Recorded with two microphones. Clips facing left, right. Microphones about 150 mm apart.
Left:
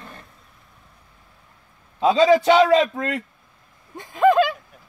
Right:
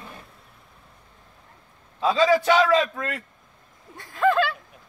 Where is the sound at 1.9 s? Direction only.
20° left (ahead or behind).